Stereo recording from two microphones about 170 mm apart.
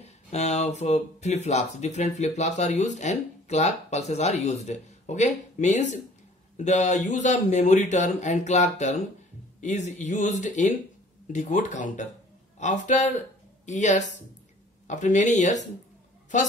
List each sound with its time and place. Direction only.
0.0 s speech: 40° left (ahead or behind)